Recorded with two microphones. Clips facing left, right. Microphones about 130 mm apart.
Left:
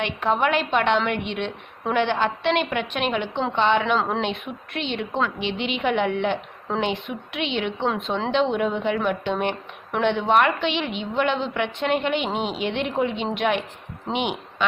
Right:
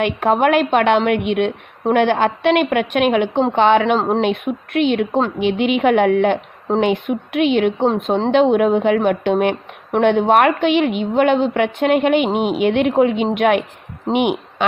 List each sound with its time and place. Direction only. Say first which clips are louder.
0.0 s a woman's voice: right 7 dB; 55° right (ahead or behind)
12.2 s a woman's voice: right 8 dB; 10° right (ahead or behind)
12.5 s a woman's voice: right 10 dB; 55° right (ahead or behind)